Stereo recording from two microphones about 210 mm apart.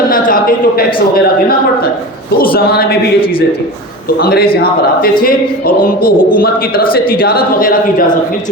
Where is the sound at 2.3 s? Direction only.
45° left (ahead or behind).